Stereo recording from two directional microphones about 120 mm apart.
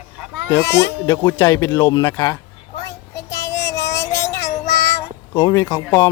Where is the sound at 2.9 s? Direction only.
25° left (ahead or behind).